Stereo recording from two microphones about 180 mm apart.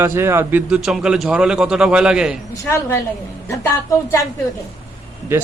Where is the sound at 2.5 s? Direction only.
15° left (ahead or behind).